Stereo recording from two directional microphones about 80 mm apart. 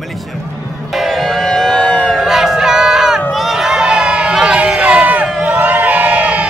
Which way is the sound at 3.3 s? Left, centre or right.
Centre.